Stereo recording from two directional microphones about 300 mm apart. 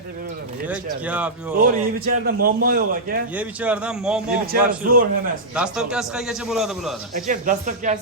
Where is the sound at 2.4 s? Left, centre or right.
Right.